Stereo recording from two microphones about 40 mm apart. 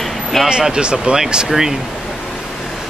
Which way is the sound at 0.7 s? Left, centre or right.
Right.